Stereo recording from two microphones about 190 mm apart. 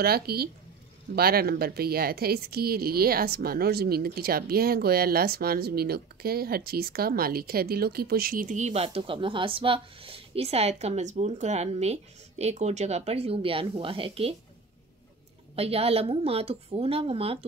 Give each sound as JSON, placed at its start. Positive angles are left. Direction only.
{"t": 0.0, "sound": "a woman's voice", "side_deg": -55}
{"t": 15.5, "sound": "a woman's voice", "side_deg": -30}